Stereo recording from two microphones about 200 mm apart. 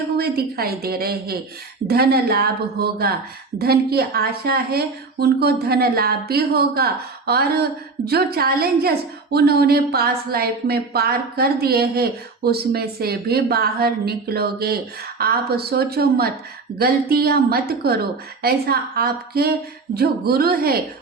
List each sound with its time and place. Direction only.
0.2 s a woman's voice: 50° right (ahead or behind)